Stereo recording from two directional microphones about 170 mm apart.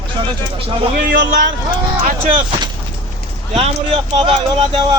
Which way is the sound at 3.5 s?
35° right (ahead or behind).